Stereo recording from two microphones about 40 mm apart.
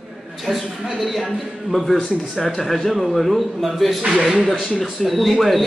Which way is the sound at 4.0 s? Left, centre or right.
Centre.